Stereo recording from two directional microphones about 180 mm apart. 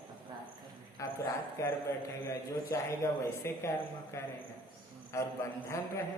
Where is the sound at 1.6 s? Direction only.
15° left (ahead or behind).